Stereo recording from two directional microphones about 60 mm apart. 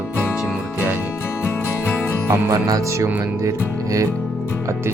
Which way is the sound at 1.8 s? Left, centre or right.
Left.